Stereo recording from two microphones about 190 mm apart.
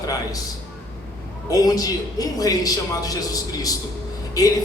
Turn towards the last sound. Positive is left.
turn(degrees=20)  # may be behind; listen again after turning